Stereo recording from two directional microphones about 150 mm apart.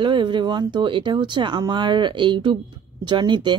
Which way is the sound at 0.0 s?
30° right (ahead or behind).